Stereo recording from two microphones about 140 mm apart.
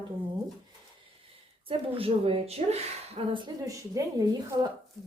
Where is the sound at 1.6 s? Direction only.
45° right (ahead or behind).